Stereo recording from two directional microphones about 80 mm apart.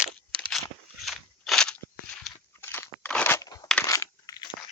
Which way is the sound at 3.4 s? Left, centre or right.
Left.